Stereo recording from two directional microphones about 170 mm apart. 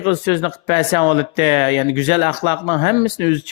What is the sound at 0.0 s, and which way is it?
Speech, 30° left (ahead or behind).